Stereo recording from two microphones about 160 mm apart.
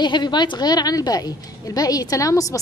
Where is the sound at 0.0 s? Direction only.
25° left (ahead or behind).